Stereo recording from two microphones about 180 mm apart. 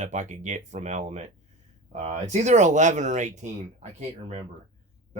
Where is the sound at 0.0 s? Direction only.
40° right (ahead or behind).